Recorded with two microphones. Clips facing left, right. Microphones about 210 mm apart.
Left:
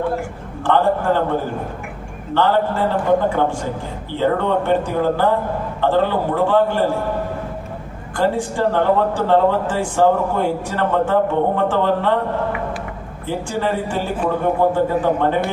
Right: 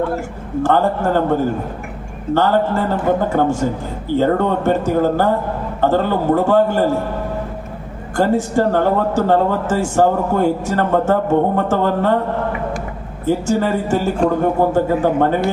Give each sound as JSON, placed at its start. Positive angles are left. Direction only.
{"t": 0.6, "sound": "a man's voice", "side_deg": -45}
{"t": 2.3, "sound": "a man's voice", "side_deg": -45}
{"t": 8.1, "sound": "a man's voice", "side_deg": -45}
{"t": 13.2, "sound": "a man's voice", "side_deg": -45}